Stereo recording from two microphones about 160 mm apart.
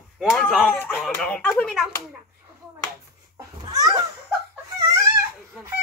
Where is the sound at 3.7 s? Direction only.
25° right (ahead or behind).